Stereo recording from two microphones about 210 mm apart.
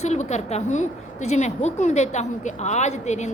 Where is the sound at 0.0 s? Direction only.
30° left (ahead or behind).